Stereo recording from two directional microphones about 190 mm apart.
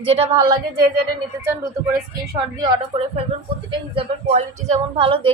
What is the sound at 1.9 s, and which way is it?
A woman's voice, 20° right (ahead or behind).